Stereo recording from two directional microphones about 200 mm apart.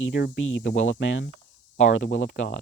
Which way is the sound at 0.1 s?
60° left (ahead or behind).